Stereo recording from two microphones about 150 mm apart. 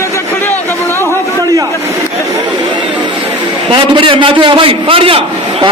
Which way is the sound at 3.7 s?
35° right (ahead or behind).